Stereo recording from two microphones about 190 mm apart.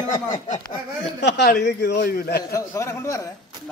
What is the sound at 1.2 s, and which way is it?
Speech, 65° left (ahead or behind).